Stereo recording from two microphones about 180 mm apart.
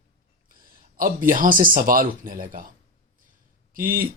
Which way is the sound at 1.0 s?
50° right (ahead or behind).